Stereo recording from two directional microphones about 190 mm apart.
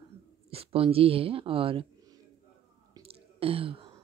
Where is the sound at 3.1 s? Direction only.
30° right (ahead or behind).